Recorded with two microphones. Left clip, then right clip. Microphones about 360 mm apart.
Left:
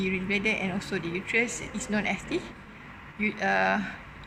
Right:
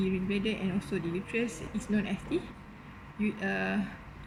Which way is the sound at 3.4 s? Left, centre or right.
Centre.